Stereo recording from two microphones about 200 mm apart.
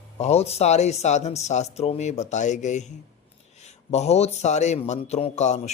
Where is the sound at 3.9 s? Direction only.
35° left (ahead or behind).